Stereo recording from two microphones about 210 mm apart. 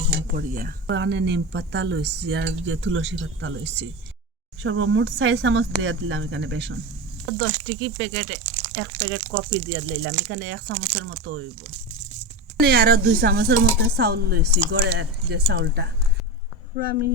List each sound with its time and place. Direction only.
0.3 s speech: 45° right (ahead or behind)
0.9 s speech: 60° right (ahead or behind)
12.5 s speech: 50° right (ahead or behind)